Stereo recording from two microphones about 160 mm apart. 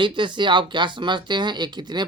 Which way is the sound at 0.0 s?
30° right (ahead or behind).